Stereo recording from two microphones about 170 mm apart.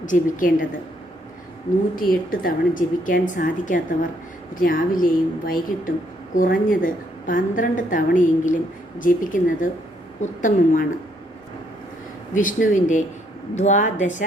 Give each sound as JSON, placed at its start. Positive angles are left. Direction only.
{"t": 0.0, "sound": "a woman's voice", "side_deg": 50}
{"t": 2.0, "sound": "a woman's voice", "side_deg": 55}
{"t": 12.3, "sound": "a woman's voice", "side_deg": 50}